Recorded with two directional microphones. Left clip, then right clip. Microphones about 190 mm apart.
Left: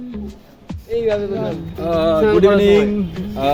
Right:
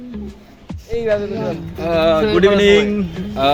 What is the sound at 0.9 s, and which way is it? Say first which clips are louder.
Music: even; 50° left (ahead or behind).